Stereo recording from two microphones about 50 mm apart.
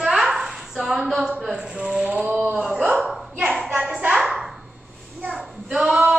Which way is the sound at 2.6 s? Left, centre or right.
Centre.